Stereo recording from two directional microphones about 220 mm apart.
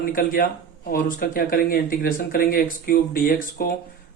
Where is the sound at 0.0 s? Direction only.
40° left (ahead or behind).